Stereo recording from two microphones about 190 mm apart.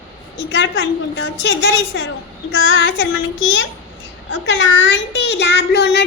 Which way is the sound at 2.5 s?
85° left.